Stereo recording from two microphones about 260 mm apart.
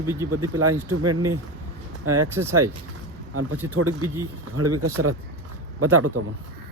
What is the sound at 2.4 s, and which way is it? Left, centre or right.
Speech, right.